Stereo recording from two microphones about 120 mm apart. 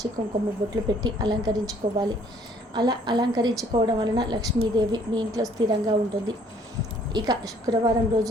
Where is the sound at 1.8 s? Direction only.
90° right.